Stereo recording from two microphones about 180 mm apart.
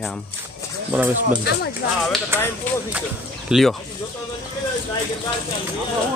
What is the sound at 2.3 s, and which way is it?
Speech, 10° right (ahead or behind).